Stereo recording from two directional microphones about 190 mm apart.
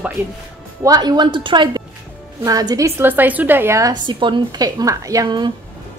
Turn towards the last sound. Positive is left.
turn(degrees=-20)  # may be behind; listen again after turning